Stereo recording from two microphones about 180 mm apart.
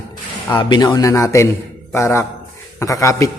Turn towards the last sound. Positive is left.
turn(degrees=15)  # may be behind; listen again after turning